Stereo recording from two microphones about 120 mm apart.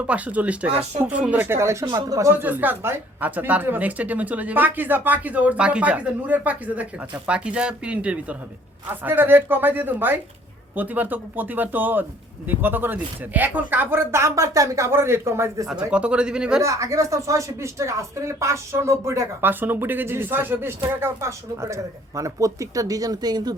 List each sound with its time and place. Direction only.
0.0 s speech: 10° right (ahead or behind)
15.6 s speech: 10° right (ahead or behind)
16.6 s speech: 25° right (ahead or behind)